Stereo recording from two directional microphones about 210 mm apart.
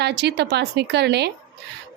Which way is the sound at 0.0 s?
50° right (ahead or behind).